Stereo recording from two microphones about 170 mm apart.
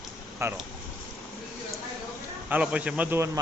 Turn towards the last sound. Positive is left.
turn(degrees=-10)  # may be behind; listen again after turning